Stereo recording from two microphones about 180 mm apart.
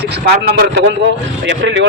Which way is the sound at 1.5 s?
90° right.